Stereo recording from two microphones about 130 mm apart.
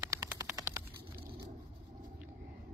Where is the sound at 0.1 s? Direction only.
25° right (ahead or behind).